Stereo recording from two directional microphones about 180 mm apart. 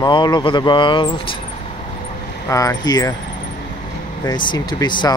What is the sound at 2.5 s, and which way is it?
Speech, 20° left (ahead or behind).